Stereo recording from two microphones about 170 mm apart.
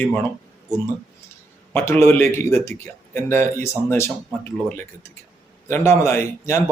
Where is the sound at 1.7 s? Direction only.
15° left (ahead or behind).